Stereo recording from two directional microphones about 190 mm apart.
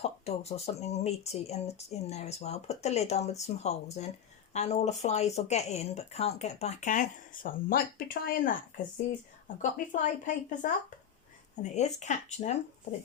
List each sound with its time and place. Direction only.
0.3 s speech: 35° left (ahead or behind)